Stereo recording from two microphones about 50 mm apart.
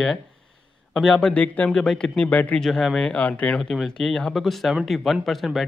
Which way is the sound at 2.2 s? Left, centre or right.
Left.